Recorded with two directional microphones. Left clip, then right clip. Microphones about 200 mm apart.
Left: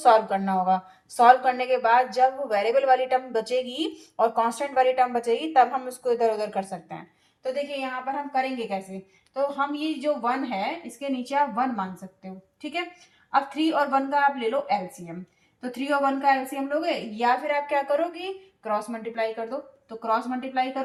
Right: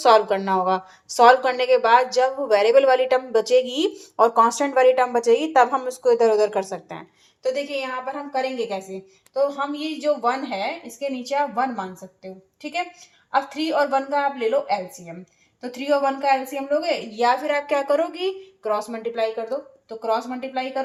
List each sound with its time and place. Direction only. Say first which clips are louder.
0.0 s a woman's voice: right 3 dB; 40° right (ahead or behind)
7.4 s a woman's voice: right 4 dB; 50° right (ahead or behind)
13.3 s a woman's voice: right 2 dB; 40° right (ahead or behind)